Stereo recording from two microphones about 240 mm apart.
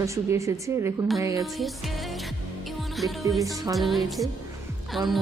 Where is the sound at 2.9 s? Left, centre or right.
Centre.